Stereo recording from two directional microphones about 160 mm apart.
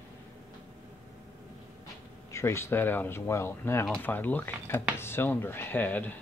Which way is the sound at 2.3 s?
15° left (ahead or behind).